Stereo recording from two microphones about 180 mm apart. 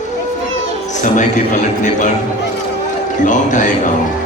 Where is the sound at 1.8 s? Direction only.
45° left (ahead or behind).